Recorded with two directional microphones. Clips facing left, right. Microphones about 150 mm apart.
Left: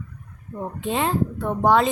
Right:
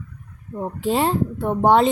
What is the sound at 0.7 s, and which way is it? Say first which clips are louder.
Speech: right 3 dB; 35° right (ahead or behind).